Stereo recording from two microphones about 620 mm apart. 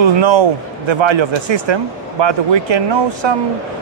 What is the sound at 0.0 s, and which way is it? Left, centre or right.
Speech, right.